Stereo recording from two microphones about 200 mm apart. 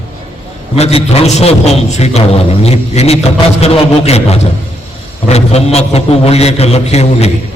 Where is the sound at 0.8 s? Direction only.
30° left (ahead or behind).